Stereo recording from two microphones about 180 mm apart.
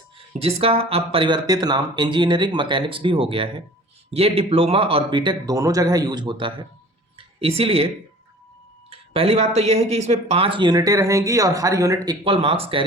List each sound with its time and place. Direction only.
0.4 s speech: 30° right (ahead or behind)
8.9 s speech: 35° right (ahead or behind)
12.2 s speech: 30° right (ahead or behind)